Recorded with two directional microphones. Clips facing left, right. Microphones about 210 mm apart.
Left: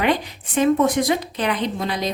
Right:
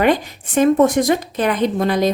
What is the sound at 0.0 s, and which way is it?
Speech, 45° right (ahead or behind).